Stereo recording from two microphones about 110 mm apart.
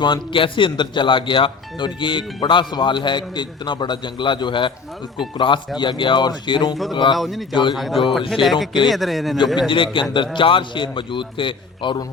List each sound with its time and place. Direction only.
0.0 s speech: 50° left (ahead or behind)
7.2 s speech: centre (ahead or behind)
7.5 s speech: 45° left (ahead or behind)
7.8 s speech: centre (ahead or behind)
9.6 s speech: 50° left (ahead or behind)